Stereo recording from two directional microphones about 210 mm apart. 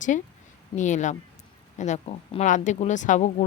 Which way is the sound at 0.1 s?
35° left (ahead or behind).